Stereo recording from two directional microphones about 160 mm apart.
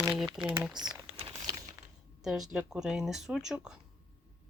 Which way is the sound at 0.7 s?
25° right (ahead or behind).